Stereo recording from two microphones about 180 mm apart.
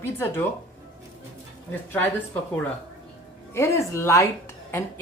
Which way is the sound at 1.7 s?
10° left (ahead or behind).